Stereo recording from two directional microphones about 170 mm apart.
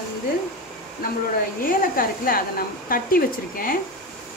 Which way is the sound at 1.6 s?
55° left (ahead or behind).